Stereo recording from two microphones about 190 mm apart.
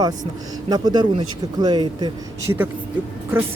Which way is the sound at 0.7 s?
20° right (ahead or behind).